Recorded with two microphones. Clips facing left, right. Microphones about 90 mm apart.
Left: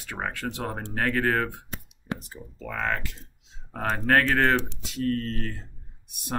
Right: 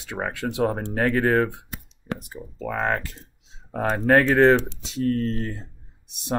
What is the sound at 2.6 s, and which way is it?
Speech, 35° right (ahead or behind).